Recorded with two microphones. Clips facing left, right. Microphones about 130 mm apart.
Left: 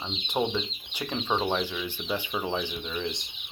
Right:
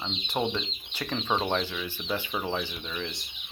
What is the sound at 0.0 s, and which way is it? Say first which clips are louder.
Speech: left 1 dB; 10° left (ahead or behind).